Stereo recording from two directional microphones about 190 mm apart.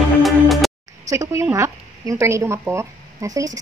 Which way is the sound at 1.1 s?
15° right (ahead or behind).